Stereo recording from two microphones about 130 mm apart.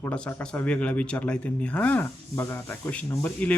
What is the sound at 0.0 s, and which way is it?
Speech, 15° left (ahead or behind).